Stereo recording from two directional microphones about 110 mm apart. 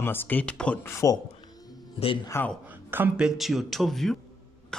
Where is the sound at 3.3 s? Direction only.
Centre (ahead or behind).